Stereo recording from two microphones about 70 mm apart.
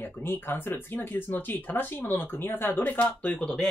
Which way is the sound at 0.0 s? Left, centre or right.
Left.